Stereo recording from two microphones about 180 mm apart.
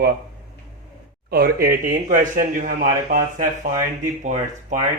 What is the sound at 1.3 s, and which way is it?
Speech, 55° right (ahead or behind).